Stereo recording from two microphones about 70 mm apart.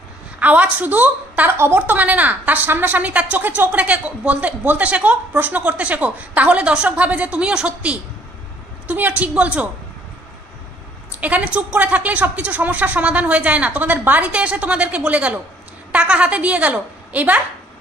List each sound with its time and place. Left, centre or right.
0.4 s a woman's voice: right
11.1 s a woman's voice: right